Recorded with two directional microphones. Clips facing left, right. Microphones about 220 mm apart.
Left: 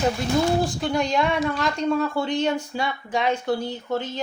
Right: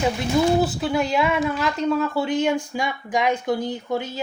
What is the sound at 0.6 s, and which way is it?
Speech, 5° right (ahead or behind).